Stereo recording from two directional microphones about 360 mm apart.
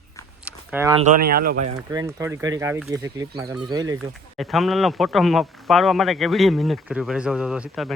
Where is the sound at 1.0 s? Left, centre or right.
Right.